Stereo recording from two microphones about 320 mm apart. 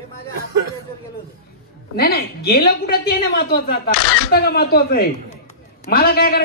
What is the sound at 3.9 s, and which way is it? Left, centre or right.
Speech, right.